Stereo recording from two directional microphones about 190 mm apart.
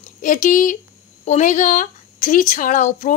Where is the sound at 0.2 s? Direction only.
40° left (ahead or behind).